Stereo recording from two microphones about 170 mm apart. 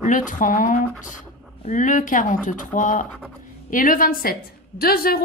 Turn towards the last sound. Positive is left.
turn(degrees=60)  # may be behind; listen again after turning